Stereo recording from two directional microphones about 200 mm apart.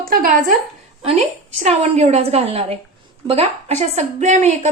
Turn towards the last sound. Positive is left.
turn(degrees=-35)  # may be behind; listen again after turning